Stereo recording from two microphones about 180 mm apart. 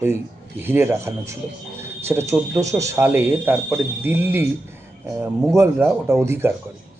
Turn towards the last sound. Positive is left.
turn(degrees=-15)  # may be behind; listen again after turning